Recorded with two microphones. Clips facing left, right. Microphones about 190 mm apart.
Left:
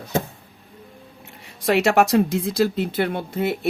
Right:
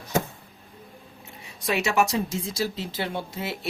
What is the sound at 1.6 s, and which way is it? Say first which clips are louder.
Speech: left 6 dB; 55° left (ahead or behind).